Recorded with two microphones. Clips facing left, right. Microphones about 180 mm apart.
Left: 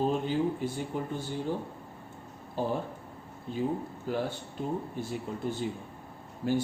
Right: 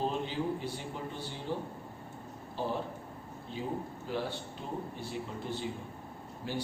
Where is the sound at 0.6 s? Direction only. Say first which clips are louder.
Left 5 dB; 50° left (ahead or behind).